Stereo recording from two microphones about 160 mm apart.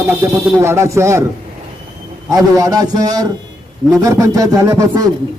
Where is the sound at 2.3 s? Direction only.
25° right (ahead or behind).